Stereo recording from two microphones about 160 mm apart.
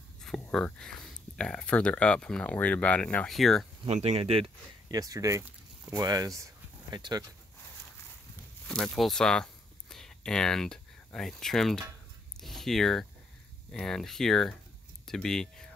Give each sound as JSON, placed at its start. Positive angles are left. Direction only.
{"t": 0.2, "sound": "speech", "side_deg": 5}
{"t": 3.8, "sound": "speech", "side_deg": -40}
{"t": 4.9, "sound": "speech", "side_deg": -20}
{"t": 8.6, "sound": "speech", "side_deg": 0}